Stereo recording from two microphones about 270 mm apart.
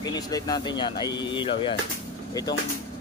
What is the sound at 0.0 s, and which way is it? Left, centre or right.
Speech, centre.